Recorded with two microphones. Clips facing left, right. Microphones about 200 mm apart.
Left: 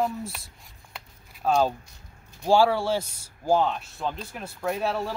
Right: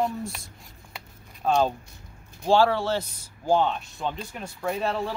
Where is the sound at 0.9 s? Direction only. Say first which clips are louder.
Even; centre (ahead or behind).